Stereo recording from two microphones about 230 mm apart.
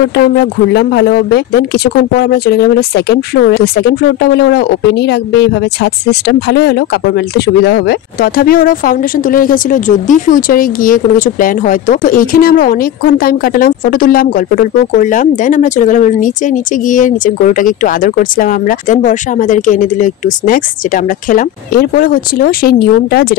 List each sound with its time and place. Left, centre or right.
0.1 s speech: left